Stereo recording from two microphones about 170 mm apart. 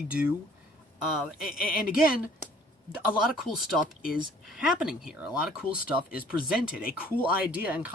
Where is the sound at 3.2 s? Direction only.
Centre (ahead or behind).